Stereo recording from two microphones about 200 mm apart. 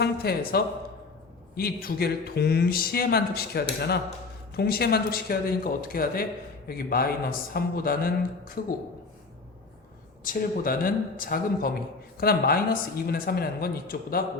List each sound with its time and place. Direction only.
0.0 s speech: 50° left (ahead or behind)
10.2 s speech: 45° left (ahead or behind)